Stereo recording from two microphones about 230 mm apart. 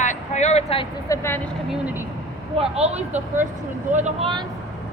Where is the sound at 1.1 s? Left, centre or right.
Centre.